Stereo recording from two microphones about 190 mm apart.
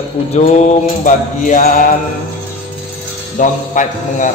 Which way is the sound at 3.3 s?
45° left (ahead or behind).